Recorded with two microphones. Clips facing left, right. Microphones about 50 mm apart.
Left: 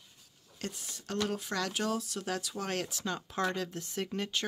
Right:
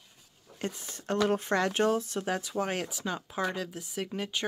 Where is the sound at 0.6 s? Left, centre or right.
Right.